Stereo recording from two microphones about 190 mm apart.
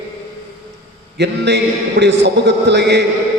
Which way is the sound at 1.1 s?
60° right (ahead or behind).